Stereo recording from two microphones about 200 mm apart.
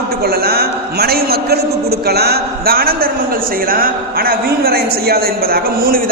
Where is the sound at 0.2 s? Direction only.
50° right (ahead or behind).